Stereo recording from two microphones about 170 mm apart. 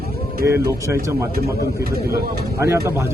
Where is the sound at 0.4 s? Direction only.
15° right (ahead or behind).